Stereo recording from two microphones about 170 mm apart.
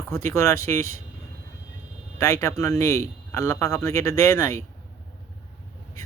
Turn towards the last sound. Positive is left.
turn(degrees=20)  # may be behind; listen again after turning